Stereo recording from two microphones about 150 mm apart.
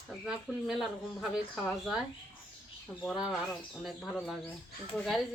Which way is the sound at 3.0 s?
Centre (ahead or behind).